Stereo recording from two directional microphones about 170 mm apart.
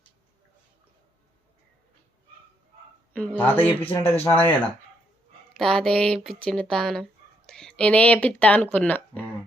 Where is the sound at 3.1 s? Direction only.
10° left (ahead or behind).